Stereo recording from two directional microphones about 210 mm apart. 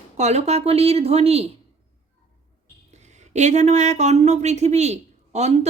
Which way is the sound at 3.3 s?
35° right (ahead or behind).